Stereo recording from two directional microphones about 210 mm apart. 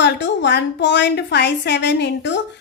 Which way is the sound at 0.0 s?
55° left (ahead or behind).